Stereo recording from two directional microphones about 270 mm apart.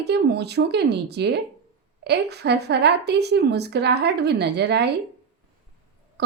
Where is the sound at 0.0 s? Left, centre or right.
Right.